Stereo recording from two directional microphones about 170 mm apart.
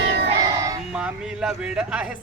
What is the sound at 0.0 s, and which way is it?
Child singing, 85° right.